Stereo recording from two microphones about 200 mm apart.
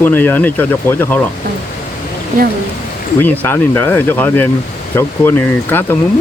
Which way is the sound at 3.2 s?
10° left (ahead or behind).